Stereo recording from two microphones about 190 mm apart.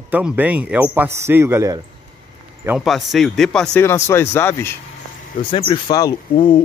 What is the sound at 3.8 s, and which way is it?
Speech, 15° left (ahead or behind).